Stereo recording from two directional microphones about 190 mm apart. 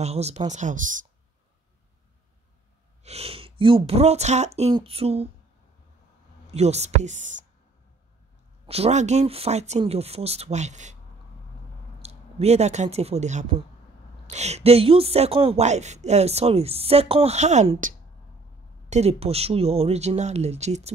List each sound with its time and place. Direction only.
0.0 s speech: 35° right (ahead or behind)
3.0 s speech: 35° right (ahead or behind)
6.5 s speech: 35° right (ahead or behind)
8.6 s speech: 35° right (ahead or behind)
12.0 s speech: 35° right (ahead or behind)